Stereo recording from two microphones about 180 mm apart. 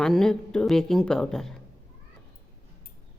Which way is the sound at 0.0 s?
5° left (ahead or behind).